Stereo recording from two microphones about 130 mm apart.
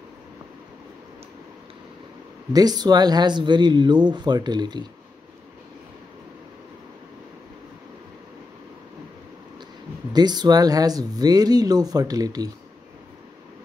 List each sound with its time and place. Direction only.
2.5 s speech: 30° right (ahead or behind)
10.1 s speech: 35° right (ahead or behind)